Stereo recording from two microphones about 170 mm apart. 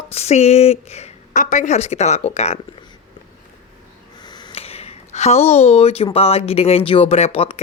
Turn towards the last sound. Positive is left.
turn(degrees=35)  # may be behind; listen again after turning